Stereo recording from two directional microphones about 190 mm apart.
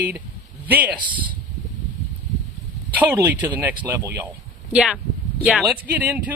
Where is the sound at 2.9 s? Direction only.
10° right (ahead or behind).